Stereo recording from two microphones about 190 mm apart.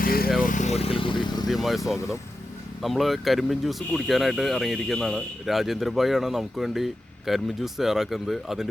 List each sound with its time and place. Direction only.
0.0 s vehicle: 50° left (ahead or behind); by 1.5 s 25° left (ahead or behind)
1.5 s speech: centre (ahead or behind)